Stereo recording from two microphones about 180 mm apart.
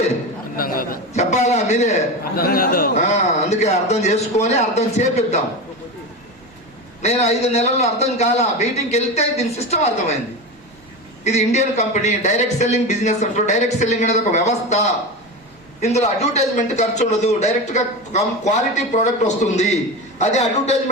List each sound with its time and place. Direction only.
0.5 s a sound: 55° left (ahead or behind)
1.2 s a sound: 40° left (ahead or behind)
2.3 s a man's voice: 55° left (ahead or behind)
2.9 s a man's voice: 40° left (ahead or behind)
7.0 s a man's voice: 35° left (ahead or behind)
11.2 s a man's voice: 40° left (ahead or behind)
15.8 s a man's voice: 40° left (ahead or behind)